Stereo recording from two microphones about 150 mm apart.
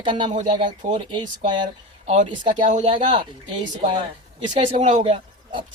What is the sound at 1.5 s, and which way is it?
Speech, 30° right (ahead or behind).